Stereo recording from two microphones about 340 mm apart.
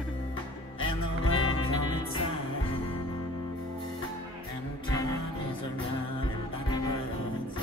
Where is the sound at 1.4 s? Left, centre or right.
Centre.